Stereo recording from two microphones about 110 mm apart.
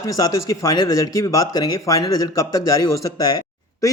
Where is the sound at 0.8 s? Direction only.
35° left (ahead or behind).